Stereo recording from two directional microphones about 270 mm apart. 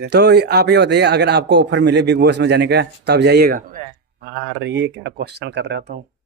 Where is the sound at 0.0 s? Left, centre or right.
Right.